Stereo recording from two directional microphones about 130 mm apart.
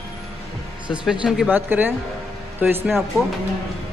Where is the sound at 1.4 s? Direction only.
15° right (ahead or behind).